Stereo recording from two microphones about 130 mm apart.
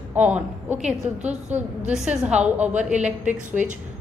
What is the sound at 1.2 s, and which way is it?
Speech, 60° right (ahead or behind).